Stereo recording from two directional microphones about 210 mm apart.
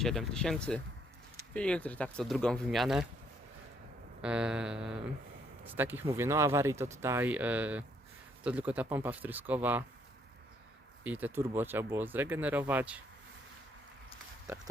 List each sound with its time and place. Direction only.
0.0 s speech: centre (ahead or behind)
4.2 s speech: 5° right (ahead or behind)
11.0 s speech: 10° right (ahead or behind)
14.4 s a sound: 10° right (ahead or behind)